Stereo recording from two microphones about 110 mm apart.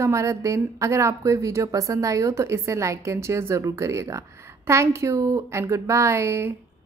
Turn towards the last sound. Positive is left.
turn(degrees=-25)  # may be behind; listen again after turning